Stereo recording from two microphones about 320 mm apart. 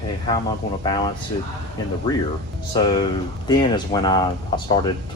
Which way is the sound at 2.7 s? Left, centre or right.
Centre.